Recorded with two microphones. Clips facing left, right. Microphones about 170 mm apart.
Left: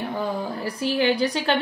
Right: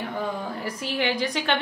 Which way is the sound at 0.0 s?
30° left (ahead or behind).